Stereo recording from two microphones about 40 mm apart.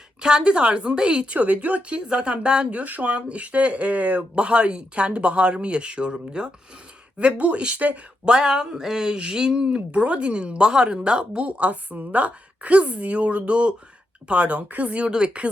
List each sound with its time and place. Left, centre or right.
0.2 s speech: centre
1.4 s a woman's voice: right
2.0 s speech: right
2.7 s a woman's voice: right
4.4 s a woman's voice: right
8.2 s speech: right
9.6 s speech: right
11.4 s a woman's voice: right
15.1 s speech: right